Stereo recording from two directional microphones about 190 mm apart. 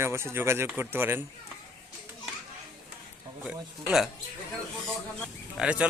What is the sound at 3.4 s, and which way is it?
Speech, 5° right (ahead or behind).